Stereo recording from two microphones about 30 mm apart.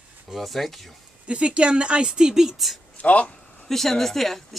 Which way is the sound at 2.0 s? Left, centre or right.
Right.